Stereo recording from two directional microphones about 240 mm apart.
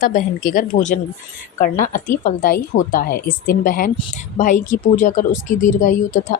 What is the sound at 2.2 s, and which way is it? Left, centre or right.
Speech, left.